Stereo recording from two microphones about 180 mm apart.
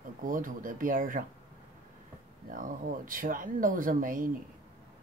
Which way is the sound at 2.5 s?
45° right (ahead or behind).